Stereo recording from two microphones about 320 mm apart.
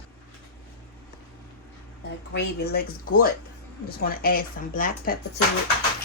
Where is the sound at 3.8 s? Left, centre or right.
Left.